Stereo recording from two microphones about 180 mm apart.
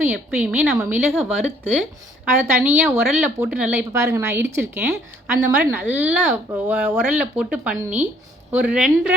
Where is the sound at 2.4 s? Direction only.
10° right (ahead or behind).